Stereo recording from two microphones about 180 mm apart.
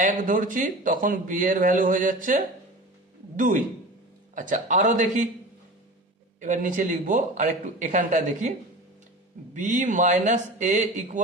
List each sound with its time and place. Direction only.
0.0 s speech: 45° right (ahead or behind)
6.4 s speech: 45° right (ahead or behind)
9.6 s speech: 45° right (ahead or behind)